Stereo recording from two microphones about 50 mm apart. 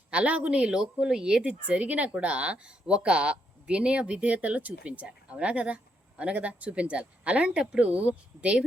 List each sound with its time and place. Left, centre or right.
0.1 s a woman's voice: right